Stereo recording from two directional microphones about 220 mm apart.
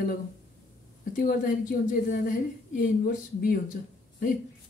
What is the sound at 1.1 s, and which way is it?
A woman's voice, 40° left (ahead or behind).